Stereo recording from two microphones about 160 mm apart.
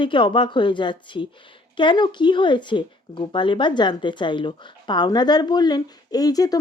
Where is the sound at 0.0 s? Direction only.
30° left (ahead or behind).